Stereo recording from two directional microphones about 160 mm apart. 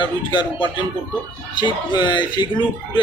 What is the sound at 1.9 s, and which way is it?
Speech, 30° left (ahead or behind).